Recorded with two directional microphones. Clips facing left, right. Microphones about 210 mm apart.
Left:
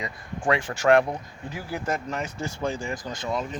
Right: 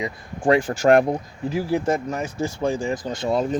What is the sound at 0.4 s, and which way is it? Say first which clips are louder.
Speech: right 5 dB; 35° right (ahead or behind).